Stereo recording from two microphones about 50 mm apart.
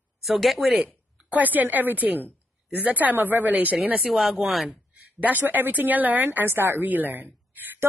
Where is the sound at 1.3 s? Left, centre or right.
Right.